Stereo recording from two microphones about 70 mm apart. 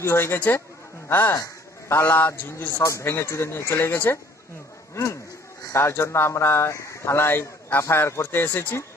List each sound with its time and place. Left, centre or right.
0.0 s a man's voice: left
2.8 s speech: left